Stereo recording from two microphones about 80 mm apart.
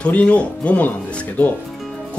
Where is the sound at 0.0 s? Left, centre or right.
Centre.